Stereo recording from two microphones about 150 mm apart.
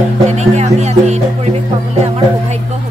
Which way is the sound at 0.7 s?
45° right (ahead or behind).